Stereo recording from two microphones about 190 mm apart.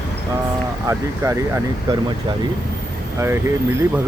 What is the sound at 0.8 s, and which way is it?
Speech, 15° right (ahead or behind).